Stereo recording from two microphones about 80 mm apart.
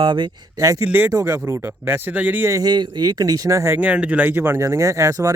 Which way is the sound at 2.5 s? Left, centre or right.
Right.